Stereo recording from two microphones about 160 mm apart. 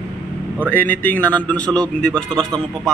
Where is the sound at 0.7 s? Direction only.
10° left (ahead or behind).